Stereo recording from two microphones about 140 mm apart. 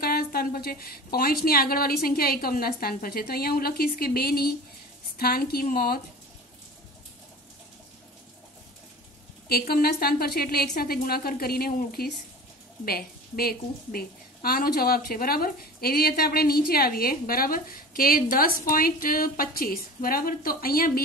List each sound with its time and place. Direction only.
0.0 s a woman's voice: 90° left
9.5 s a woman's voice: 90° left